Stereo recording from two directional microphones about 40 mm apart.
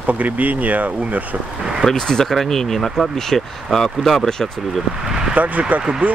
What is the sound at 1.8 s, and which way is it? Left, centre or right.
Speech, centre.